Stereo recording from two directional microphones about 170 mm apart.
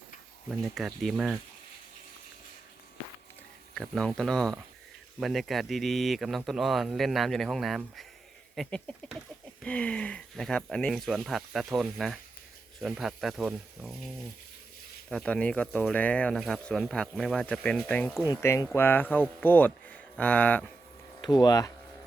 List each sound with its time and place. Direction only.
0.4 s speech: 5° right (ahead or behind)
3.8 s speech: 5° left (ahead or behind)
15.1 s speech: 5° left (ahead or behind)
21.2 s speech: 25° left (ahead or behind)